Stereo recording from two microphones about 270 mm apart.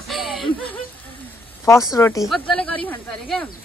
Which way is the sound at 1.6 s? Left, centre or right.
Centre.